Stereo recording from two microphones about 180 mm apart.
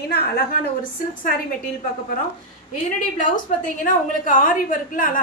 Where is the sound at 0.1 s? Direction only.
60° left (ahead or behind).